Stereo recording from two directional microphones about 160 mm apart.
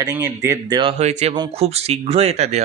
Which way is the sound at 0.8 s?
40° right (ahead or behind).